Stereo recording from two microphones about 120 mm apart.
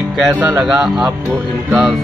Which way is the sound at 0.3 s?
10° right (ahead or behind).